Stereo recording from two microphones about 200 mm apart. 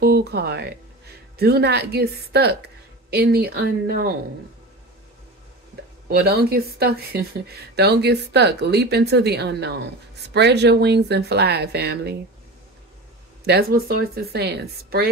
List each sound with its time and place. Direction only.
0.0 s a woman's voice: 55° right (ahead or behind)
6.0 s speech: 50° right (ahead or behind)
13.5 s a woman's voice: 50° right (ahead or behind)